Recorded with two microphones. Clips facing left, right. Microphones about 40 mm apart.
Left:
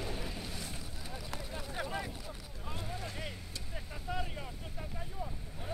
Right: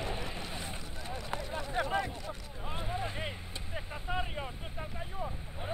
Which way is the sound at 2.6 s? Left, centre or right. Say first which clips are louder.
Right 5 dB; right.